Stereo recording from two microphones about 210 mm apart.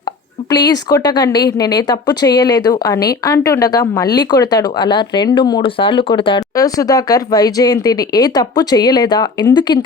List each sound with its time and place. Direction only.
0.5 s speech: 20° left (ahead or behind)